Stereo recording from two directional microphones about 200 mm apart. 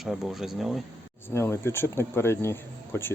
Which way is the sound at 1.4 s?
15° left (ahead or behind).